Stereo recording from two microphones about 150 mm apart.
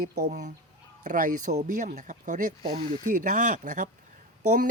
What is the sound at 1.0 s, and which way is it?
Speech, 60° right (ahead or behind).